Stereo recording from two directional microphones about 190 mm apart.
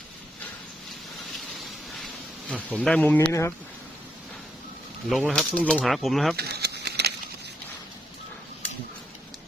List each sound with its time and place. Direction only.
2.5 s speech: 5° left (ahead or behind)
5.0 s speech: centre (ahead or behind)
6.3 s a sound: 55° right (ahead or behind)